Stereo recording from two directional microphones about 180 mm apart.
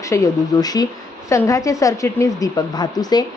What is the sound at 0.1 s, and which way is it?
A woman's voice, 20° left (ahead or behind).